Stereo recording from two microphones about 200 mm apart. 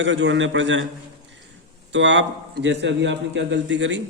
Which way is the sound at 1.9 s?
65° right (ahead or behind).